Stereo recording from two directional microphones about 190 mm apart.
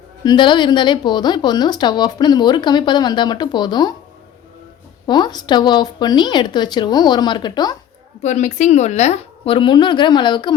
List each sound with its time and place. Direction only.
0.3 s speech: 25° left (ahead or behind)
5.0 s speech: 20° left (ahead or behind)
8.2 s speech: 40° left (ahead or behind)